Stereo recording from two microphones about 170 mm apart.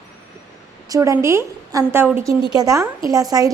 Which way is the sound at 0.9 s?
20° right (ahead or behind).